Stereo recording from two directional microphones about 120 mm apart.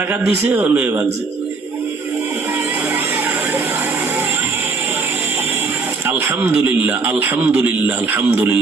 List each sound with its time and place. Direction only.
0.1 s a man's voice: 15° right (ahead or behind)
6.1 s a man's voice: 15° right (ahead or behind)